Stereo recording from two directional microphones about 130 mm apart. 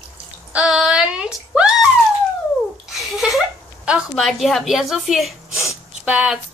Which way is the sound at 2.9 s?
Centre (ahead or behind).